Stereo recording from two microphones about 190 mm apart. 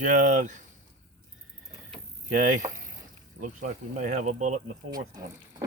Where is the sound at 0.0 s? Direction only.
40° right (ahead or behind).